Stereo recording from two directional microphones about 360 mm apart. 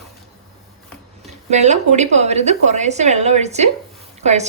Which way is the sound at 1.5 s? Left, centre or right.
Centre.